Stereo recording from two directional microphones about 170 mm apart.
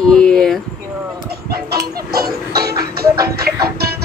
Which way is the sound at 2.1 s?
65° right (ahead or behind).